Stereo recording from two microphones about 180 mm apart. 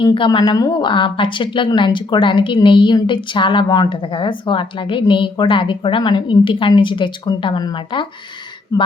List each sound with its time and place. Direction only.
0.0 s a woman's voice: 25° left (ahead or behind)